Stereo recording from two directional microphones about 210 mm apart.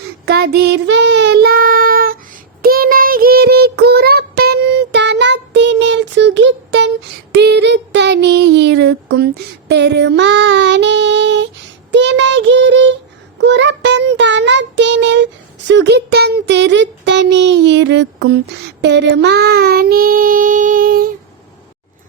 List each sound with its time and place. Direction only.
0.3 s child singing: 50° right (ahead or behind)